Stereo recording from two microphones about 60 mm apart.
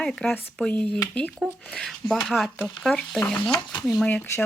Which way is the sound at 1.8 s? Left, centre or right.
Centre.